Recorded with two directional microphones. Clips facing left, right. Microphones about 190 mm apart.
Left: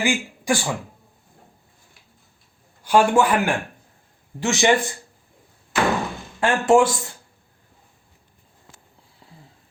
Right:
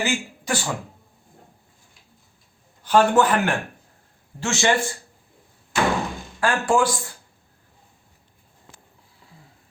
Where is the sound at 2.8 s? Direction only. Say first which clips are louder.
Even; 10° left (ahead or behind).